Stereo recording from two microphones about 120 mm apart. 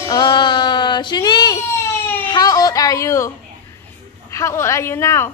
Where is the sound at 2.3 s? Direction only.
30° left (ahead or behind).